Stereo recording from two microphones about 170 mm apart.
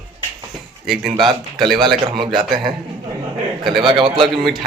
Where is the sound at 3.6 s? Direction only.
25° right (ahead or behind).